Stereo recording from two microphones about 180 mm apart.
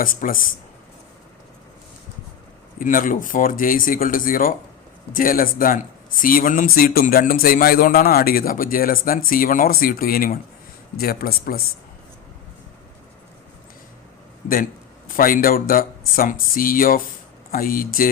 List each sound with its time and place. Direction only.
0.0 s speech: 50° left (ahead or behind)
2.7 s a man's voice: 50° left (ahead or behind)
14.4 s a man's voice: 55° left (ahead or behind)